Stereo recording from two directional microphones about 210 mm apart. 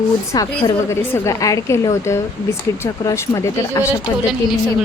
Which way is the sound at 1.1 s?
15° left (ahead or behind).